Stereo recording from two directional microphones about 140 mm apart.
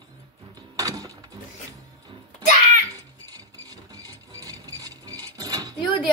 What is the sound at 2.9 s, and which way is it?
Ratchet, 25° right (ahead or behind).